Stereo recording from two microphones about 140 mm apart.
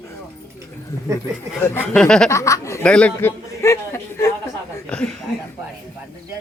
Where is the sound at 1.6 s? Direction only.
10° left (ahead or behind).